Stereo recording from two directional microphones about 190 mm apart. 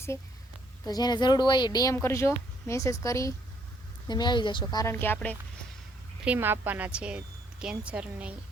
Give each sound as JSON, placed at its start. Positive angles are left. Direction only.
{"t": 0.9, "sound": "a woman's voice", "side_deg": 20}
{"t": 6.2, "sound": "a woman's voice", "side_deg": -10}